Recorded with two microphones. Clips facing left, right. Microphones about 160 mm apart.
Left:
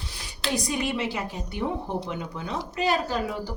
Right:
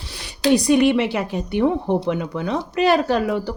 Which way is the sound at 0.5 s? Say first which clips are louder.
Right 13 dB; 70° right (ahead or behind).